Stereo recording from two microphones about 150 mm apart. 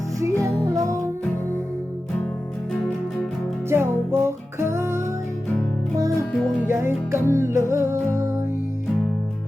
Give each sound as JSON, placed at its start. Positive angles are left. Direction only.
{"t": 0.2, "sound": "music", "side_deg": -20}
{"t": 3.7, "sound": "music", "side_deg": -15}
{"t": 6.7, "sound": "music", "side_deg": -15}